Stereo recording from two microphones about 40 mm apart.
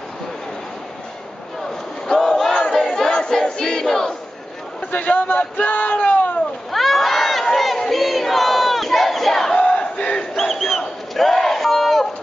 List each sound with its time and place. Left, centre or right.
2.0 s battle cry: centre
3.1 s crowd: left
3.4 s battle cry: centre
4.9 s a man's voice: left
5.7 s a sound: left
6.7 s crowd: centre
9.6 s battle cry: left
10.3 s crowd: centre
11.1 s battle cry: centre